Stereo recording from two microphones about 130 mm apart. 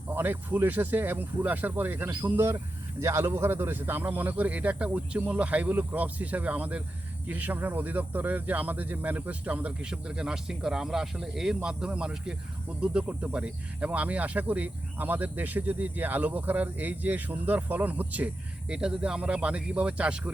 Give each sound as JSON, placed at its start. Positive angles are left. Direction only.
{"t": 0.1, "sound": "speech", "side_deg": -15}